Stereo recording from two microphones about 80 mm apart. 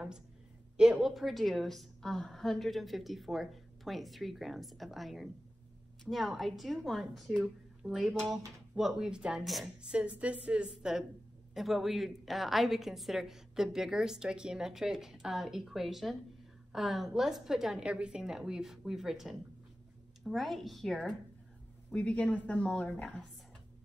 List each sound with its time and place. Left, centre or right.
0.7 s a woman's voice: centre
9.8 s a woman's voice: centre
21.9 s a woman's voice: centre